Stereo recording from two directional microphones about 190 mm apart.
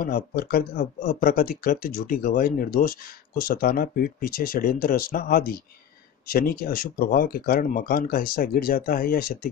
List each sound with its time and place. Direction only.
0.0 s speech: 50° left (ahead or behind)